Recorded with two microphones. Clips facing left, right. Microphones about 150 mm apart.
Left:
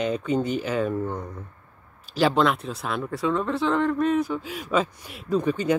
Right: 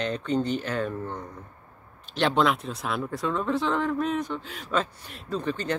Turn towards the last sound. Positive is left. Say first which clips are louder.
# left 6 dB
turn(degrees=10)  # may be behind; listen again after turning